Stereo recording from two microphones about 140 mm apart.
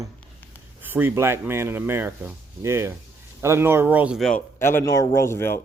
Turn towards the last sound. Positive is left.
turn(degrees=15)  # may be behind; listen again after turning